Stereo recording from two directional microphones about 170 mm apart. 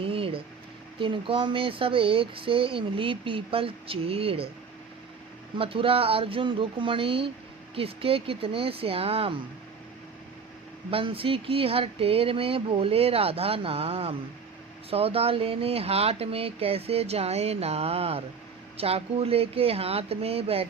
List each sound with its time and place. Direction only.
0.0 s a sound: 35° right (ahead or behind)
0.9 s speech: 30° right (ahead or behind)
5.5 s speech: 30° right (ahead or behind)
10.9 s speech: 35° right (ahead or behind)